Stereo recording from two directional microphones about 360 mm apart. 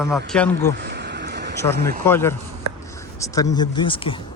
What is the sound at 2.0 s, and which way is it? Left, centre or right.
Speech, centre.